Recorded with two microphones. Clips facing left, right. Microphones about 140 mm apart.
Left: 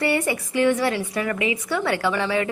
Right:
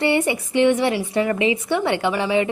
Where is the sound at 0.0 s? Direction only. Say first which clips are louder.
Right 3 dB; 25° right (ahead or behind).